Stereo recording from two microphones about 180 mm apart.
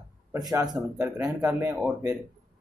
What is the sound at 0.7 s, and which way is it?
Speech, 20° right (ahead or behind).